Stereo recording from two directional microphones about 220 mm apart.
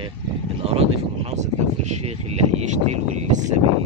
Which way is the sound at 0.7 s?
25° right (ahead or behind).